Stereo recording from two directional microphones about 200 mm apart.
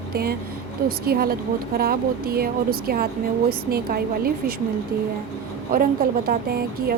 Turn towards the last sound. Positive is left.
turn(degrees=-50)  # may be behind; listen again after turning